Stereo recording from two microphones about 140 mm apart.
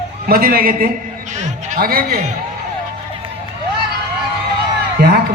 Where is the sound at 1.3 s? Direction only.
60° right (ahead or behind); by 2.2 s 90° right.